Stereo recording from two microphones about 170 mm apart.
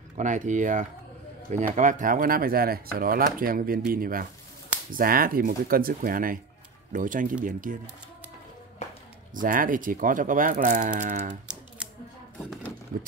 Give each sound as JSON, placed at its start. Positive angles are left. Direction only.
{"t": 0.2, "sound": "speech", "side_deg": -45}
{"t": 9.3, "sound": "speech", "side_deg": -55}
{"t": 11.8, "sound": "typewriter", "side_deg": -5}